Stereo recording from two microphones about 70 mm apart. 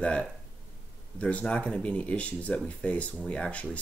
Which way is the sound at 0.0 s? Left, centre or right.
Centre.